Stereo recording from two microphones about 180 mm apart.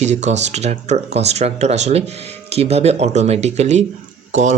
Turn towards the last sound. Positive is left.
turn(degrees=-40)  # may be behind; listen again after turning